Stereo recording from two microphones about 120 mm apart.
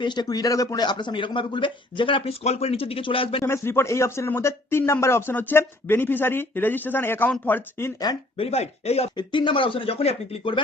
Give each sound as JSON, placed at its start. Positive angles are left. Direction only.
{"t": 0.0, "sound": "speech", "side_deg": 40}
{"t": 2.4, "sound": "speech", "side_deg": 60}
{"t": 3.4, "sound": "speech", "side_deg": 20}
{"t": 8.4, "sound": "speech", "side_deg": 60}
{"t": 9.1, "sound": "speech", "side_deg": 40}